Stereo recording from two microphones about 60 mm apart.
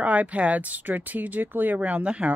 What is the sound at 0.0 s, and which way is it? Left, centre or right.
Speech, right.